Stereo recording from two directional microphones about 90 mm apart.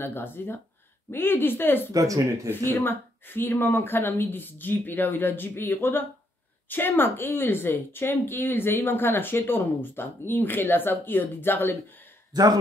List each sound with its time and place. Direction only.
0.0 s a woman's voice: 25° left (ahead or behind)
1.9 s speech: 40° right (ahead or behind)
2.5 s a woman's voice: 25° left (ahead or behind)